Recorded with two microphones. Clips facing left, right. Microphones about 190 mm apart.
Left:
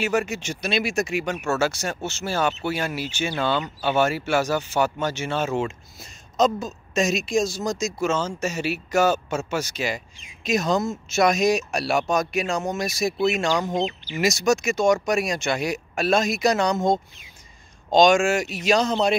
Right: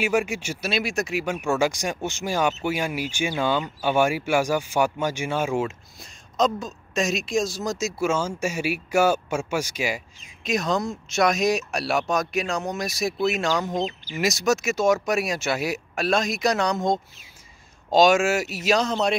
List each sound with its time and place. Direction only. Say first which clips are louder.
0.0 s speech: even; 10° right (ahead or behind)
5.9 s speech: left 2 dB; centre (ahead or behind)
10.4 s speech: left 2 dB; centre (ahead or behind)